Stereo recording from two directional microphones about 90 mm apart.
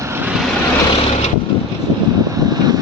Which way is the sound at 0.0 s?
30° right (ahead or behind).